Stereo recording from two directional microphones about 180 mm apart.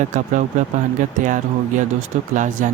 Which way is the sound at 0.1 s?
45° right (ahead or behind).